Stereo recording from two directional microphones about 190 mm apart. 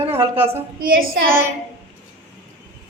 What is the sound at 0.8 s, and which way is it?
Child singing, 50° right (ahead or behind).